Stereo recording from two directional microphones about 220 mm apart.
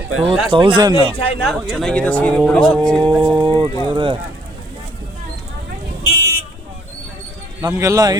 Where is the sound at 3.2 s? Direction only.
20° right (ahead or behind).